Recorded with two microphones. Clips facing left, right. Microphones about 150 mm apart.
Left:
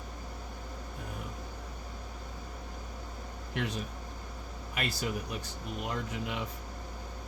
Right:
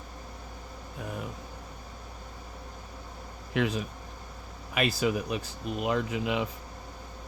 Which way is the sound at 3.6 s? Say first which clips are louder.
Right 7 dB; 90° right.